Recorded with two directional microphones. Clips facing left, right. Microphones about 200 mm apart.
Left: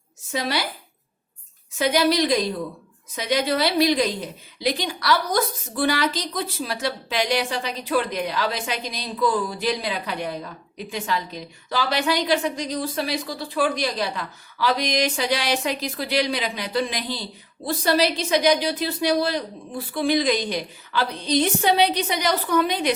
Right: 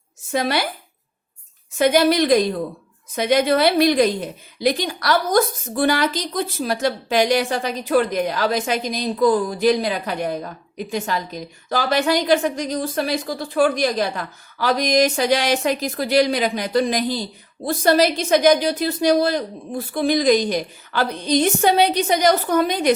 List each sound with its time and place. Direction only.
0.3 s a woman's voice: 55° right (ahead or behind)
1.8 s a woman's voice: 50° right (ahead or behind)